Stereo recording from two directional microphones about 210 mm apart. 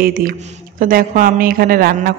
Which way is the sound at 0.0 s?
45° right (ahead or behind).